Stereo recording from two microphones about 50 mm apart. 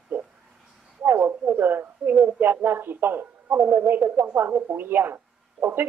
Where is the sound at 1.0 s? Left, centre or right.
Right.